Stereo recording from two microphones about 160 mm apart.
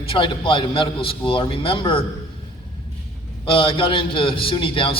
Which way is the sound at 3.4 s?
35° left (ahead or behind).